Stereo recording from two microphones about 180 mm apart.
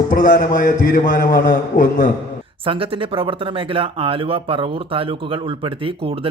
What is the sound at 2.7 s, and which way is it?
Speech, 30° right (ahead or behind).